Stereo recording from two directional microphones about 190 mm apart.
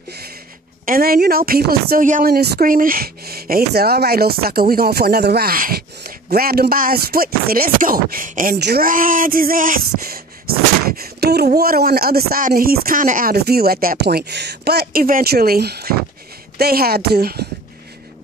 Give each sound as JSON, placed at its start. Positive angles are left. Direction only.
{"t": 0.8, "sound": "a woman's voice", "side_deg": -50}